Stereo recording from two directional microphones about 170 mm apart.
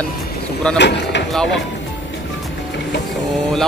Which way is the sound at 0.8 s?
90° left.